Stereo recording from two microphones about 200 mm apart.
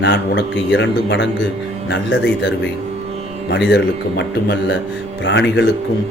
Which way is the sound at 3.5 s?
60° left (ahead or behind).